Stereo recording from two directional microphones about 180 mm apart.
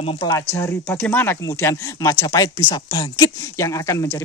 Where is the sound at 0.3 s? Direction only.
15° left (ahead or behind).